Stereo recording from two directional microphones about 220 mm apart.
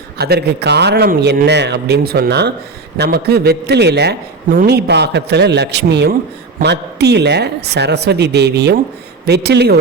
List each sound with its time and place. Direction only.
0.2 s a man's voice: 45° right (ahead or behind)